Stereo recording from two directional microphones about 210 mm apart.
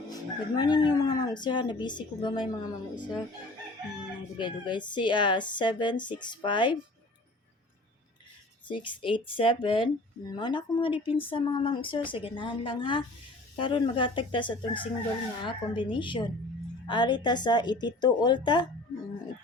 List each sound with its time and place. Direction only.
0.1 s speech: 20° left (ahead or behind)
4.4 s speech: 20° left (ahead or behind)
8.6 s speech: 25° left (ahead or behind)